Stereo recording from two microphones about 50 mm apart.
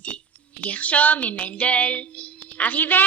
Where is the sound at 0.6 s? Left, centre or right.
Left.